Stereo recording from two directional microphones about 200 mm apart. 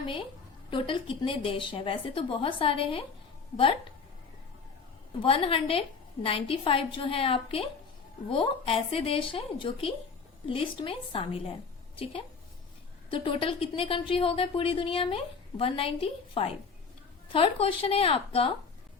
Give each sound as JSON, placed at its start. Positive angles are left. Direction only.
{"t": 0.7, "sound": "a woman's voice", "side_deg": 25}
{"t": 5.2, "sound": "a woman's voice", "side_deg": 25}
{"t": 13.1, "sound": "a woman's voice", "side_deg": 25}